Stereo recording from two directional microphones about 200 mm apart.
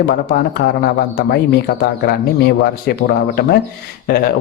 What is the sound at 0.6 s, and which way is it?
Speech, 60° left (ahead or behind).